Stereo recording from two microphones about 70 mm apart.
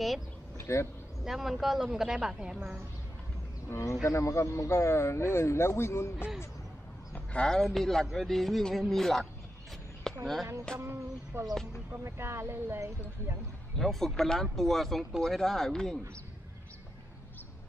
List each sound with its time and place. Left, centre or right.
0.6 s a sound: left
1.2 s speech: centre
3.6 s speech: left
7.2 s speech: centre
10.1 s a sound: centre
10.8 s speech: right
13.7 s speech: centre